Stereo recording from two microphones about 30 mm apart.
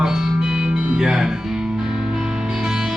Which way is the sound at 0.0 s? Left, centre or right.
Centre.